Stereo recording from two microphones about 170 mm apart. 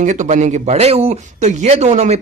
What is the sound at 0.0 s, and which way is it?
Speech, 45° right (ahead or behind).